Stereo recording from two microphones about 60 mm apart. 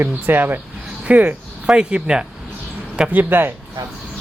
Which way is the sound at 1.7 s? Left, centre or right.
Centre.